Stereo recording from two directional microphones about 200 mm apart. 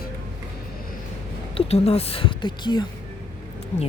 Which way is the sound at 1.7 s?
30° left (ahead or behind).